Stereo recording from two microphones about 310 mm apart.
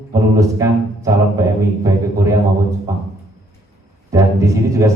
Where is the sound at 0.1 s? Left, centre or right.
Centre.